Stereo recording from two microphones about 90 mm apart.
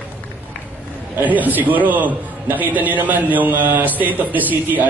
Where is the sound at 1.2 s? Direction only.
20° right (ahead or behind).